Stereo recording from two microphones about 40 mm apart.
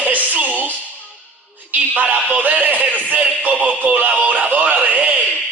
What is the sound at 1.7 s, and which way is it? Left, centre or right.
A man's voice, right.